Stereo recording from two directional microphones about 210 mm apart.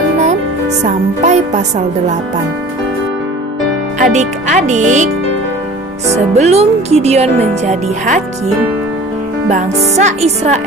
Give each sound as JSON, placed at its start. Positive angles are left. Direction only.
{"t": 0.8, "sound": "speech", "side_deg": -35}
{"t": 4.0, "sound": "speech", "side_deg": -35}
{"t": 6.3, "sound": "speech", "side_deg": -30}
{"t": 9.5, "sound": "speech", "side_deg": -35}